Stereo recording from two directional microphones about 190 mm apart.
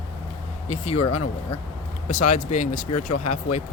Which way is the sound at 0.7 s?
35° left (ahead or behind).